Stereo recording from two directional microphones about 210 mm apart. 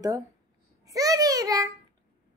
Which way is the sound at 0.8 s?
15° right (ahead or behind).